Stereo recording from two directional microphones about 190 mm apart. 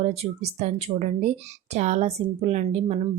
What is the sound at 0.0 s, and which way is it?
Speech, 35° right (ahead or behind).